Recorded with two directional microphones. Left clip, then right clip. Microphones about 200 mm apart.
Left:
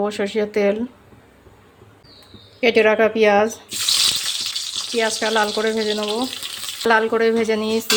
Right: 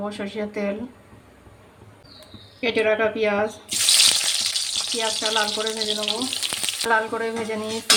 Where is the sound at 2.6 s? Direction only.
45° left (ahead or behind).